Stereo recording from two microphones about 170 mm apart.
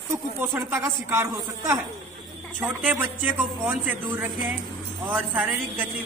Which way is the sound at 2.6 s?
10° right (ahead or behind).